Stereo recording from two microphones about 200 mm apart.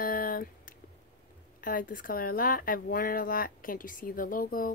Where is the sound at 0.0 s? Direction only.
45° left (ahead or behind).